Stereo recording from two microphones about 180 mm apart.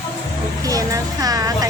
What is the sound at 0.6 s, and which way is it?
Speech, 20° right (ahead or behind).